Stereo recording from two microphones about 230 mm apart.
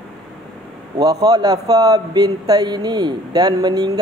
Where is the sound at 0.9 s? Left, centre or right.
Centre.